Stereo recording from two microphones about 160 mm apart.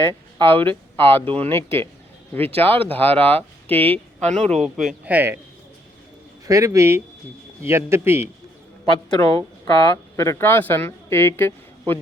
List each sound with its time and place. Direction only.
0.1 s a sound: 15° left (ahead or behind)
0.5 s speech: 35° right (ahead or behind)
0.9 s speech: 15° left (ahead or behind)
4.2 s speech: 45° right (ahead or behind)
5.0 s a man's voice: 10° right (ahead or behind)
6.4 s a man's voice: 20° right (ahead or behind)
9.0 s a woman's voice: 20° left (ahead or behind)